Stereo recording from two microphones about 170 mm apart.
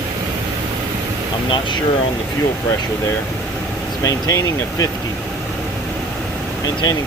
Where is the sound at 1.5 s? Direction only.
25° left (ahead or behind).